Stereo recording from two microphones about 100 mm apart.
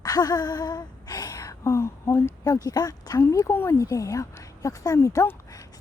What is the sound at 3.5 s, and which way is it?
A woman's voice, 25° left (ahead or behind).